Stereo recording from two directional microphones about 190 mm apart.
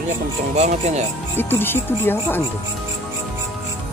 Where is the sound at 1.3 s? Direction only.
10° left (ahead or behind).